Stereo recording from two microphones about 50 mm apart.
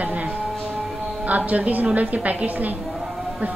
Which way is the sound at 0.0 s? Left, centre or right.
Right.